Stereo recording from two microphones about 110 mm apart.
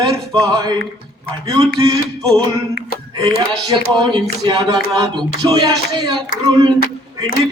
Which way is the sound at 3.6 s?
35° right (ahead or behind).